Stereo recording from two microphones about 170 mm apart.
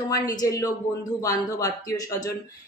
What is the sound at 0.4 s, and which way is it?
A woman's voice, 20° left (ahead or behind).